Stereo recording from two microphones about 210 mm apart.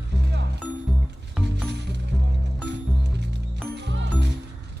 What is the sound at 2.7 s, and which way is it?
Music, 55° right (ahead or behind).